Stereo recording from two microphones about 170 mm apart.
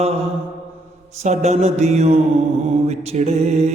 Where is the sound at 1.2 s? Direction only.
40° right (ahead or behind).